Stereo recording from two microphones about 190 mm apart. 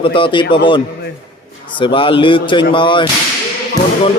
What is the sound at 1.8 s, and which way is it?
Speech, 25° left (ahead or behind).